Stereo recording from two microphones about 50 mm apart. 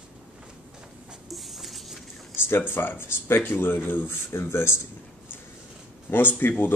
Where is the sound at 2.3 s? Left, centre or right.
Left.